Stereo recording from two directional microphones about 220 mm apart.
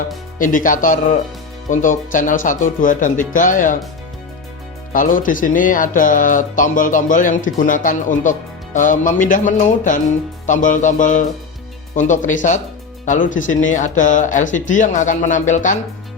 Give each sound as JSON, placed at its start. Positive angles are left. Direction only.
{"t": 0.3, "sound": "speech", "side_deg": 35}
{"t": 4.9, "sound": "speech", "side_deg": 40}